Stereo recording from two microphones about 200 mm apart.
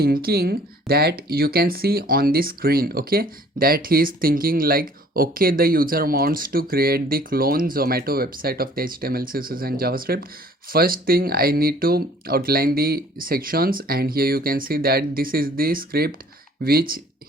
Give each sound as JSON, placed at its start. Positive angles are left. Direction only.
{"t": 0.0, "sound": "speech", "side_deg": -50}